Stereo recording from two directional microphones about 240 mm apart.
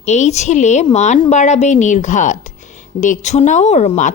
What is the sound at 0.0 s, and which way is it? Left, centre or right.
A woman's voice, left.